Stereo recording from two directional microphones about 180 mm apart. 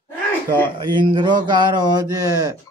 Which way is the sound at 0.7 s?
25° right (ahead or behind).